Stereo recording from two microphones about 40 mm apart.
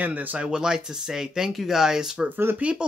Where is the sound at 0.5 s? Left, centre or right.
Centre.